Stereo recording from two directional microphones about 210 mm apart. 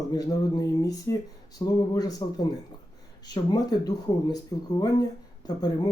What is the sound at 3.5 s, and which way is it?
Speech, 15° left (ahead or behind).